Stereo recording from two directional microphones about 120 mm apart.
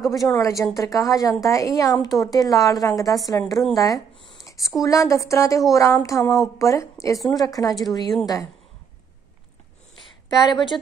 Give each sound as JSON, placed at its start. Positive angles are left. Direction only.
{"t": 0.0, "sound": "a woman's voice", "side_deg": 0}
{"t": 0.4, "sound": "speech", "side_deg": 25}